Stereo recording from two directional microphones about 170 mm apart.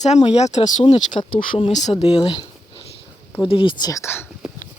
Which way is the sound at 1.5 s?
40° left (ahead or behind).